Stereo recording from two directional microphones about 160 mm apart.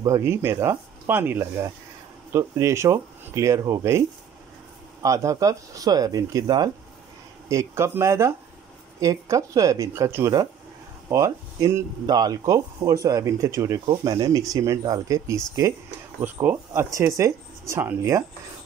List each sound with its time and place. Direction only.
0.0 s speech: 20° right (ahead or behind)
5.0 s speech: 20° right (ahead or behind)